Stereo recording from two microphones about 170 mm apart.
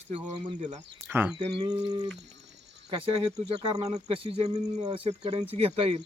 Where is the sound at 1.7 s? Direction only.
25° right (ahead or behind).